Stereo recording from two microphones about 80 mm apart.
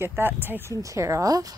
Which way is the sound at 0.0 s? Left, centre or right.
Right.